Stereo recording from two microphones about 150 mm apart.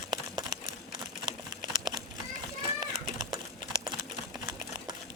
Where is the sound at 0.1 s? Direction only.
30° right (ahead or behind).